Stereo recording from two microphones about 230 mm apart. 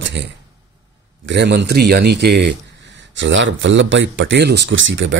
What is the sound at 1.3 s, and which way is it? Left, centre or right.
Speech, right.